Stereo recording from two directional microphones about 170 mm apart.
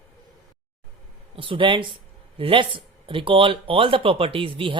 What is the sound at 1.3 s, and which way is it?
Speech, 30° right (ahead or behind).